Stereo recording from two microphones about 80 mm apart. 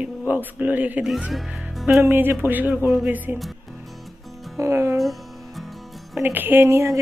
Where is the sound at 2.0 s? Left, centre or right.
Right.